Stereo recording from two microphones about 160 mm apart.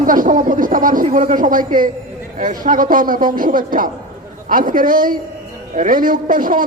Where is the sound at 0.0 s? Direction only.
55° right (ahead or behind).